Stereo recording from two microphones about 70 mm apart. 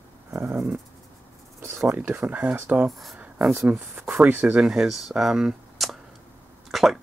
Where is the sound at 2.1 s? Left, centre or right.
Right.